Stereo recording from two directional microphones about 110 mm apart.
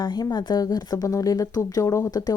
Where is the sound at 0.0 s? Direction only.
45° left (ahead or behind).